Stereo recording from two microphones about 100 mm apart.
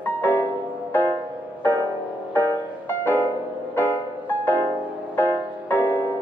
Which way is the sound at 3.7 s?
20° left (ahead or behind).